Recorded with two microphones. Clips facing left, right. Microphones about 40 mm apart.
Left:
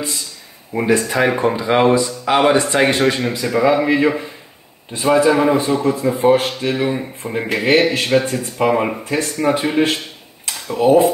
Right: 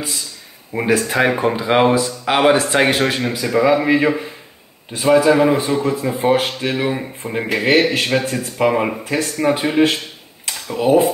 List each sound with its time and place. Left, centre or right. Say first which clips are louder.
0.7 s speech: even; right
1.3 s speech: even; centre
3.0 s speech: left 2 dB; centre